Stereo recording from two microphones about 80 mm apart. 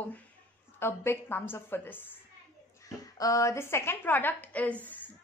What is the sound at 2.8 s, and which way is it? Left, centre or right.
A woman's voice, left.